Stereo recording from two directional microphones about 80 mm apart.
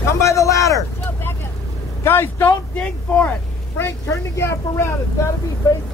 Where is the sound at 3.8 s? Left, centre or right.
Left.